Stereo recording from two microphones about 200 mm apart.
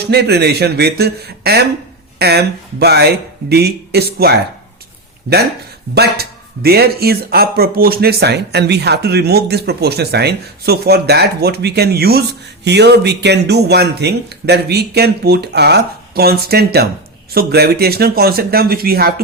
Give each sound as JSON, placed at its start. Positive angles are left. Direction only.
{"t": 0.0, "sound": "speech", "side_deg": -55}
{"t": 5.9, "sound": "speech", "side_deg": -50}